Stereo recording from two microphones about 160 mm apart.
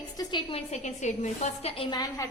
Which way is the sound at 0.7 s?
45° left (ahead or behind).